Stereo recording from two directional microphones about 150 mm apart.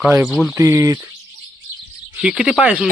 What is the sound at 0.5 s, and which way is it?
Speech, 20° right (ahead or behind).